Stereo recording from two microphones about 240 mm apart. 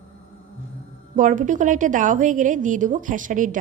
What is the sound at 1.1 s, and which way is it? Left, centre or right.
A woman's voice, right.